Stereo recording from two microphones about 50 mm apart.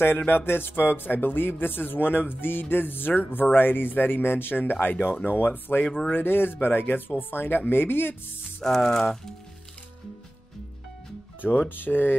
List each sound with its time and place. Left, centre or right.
0.5 s a man's voice: left
8.6 s speech: centre
11.7 s speech: left